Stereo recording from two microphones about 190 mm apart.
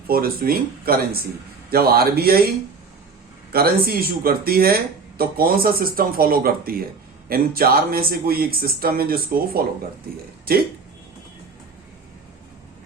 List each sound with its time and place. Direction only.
0.1 s speech: 50° right (ahead or behind)
3.5 s speech: 50° right (ahead or behind)